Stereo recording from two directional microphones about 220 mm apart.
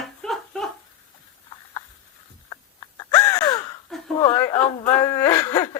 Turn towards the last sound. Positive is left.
turn(degrees=15)  # may be behind; listen again after turning